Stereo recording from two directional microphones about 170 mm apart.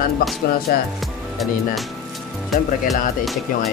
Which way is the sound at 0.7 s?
60° left (ahead or behind).